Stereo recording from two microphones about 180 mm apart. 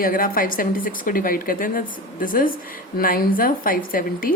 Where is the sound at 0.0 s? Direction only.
50° left (ahead or behind).